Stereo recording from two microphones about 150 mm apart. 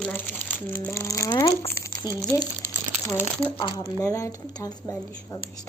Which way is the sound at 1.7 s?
20° left (ahead or behind).